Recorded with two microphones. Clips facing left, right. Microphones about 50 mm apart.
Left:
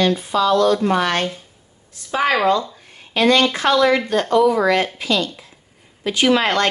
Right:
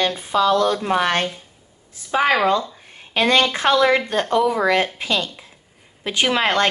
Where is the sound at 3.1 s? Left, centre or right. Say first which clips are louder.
Left 2 dB; right.